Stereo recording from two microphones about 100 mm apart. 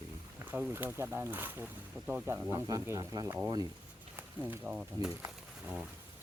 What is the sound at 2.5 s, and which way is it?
Speech, 40° right (ahead or behind).